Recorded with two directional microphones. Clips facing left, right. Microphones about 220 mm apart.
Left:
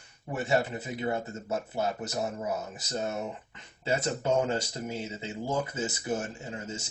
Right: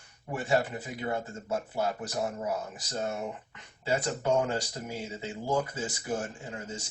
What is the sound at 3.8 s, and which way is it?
Speech, 25° left (ahead or behind).